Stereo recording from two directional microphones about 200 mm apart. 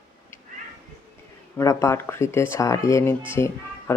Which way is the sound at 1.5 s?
15° left (ahead or behind).